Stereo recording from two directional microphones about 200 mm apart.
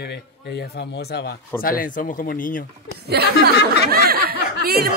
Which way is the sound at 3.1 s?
50° right (ahead or behind).